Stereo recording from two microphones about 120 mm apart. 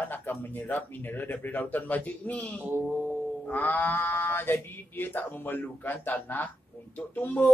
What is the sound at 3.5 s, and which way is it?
Speech, 15° left (ahead or behind).